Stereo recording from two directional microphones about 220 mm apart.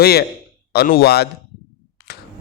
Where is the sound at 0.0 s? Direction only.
45° left (ahead or behind).